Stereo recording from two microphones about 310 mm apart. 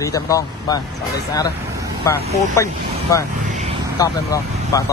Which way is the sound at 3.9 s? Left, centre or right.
Centre.